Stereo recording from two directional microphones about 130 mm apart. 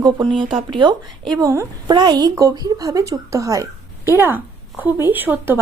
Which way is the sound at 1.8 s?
35° right (ahead or behind).